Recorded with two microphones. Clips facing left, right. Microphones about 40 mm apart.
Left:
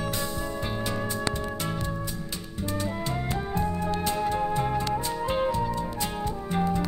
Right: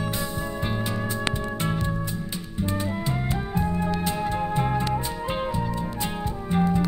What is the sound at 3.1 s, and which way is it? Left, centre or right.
Music, centre.